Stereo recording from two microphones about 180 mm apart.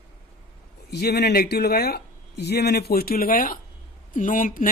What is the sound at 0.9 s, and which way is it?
Speech, 65° left (ahead or behind).